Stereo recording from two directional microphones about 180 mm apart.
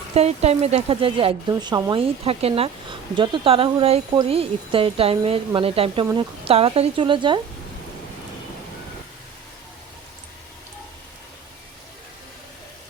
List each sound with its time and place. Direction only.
0.1 s speech: 35° right (ahead or behind)